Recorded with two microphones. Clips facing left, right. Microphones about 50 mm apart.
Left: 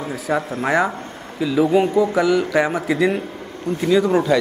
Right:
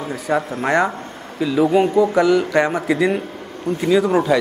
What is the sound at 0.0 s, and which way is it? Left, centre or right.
Speech, centre.